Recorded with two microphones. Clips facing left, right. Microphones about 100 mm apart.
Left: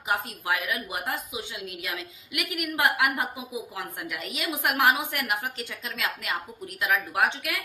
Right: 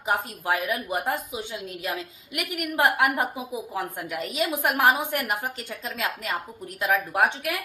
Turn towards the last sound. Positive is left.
turn(degrees=-45)  # may be behind; listen again after turning